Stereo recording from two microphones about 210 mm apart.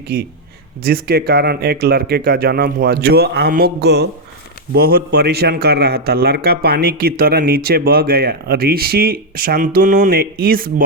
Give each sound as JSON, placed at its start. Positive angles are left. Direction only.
{"t": 0.1, "sound": "a man's voice", "side_deg": -45}